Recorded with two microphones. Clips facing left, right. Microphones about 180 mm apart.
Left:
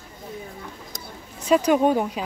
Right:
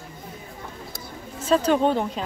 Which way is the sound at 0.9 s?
15° left (ahead or behind).